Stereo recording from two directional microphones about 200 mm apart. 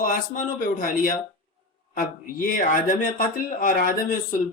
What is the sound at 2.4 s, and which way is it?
Speech, 45° left (ahead or behind).